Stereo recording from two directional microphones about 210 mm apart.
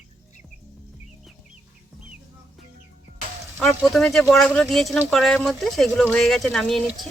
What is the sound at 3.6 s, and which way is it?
Speech, centre (ahead or behind).